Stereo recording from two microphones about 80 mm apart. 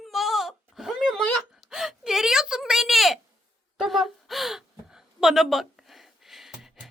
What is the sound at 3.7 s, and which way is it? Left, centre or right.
Gasp, centre.